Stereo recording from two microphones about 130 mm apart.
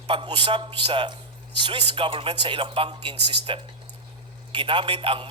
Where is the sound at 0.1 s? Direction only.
40° right (ahead or behind).